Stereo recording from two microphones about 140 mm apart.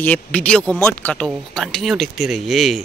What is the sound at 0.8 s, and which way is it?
Speech, 20° left (ahead or behind).